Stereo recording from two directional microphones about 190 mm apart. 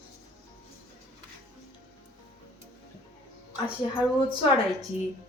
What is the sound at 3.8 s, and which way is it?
Speech, 25° left (ahead or behind).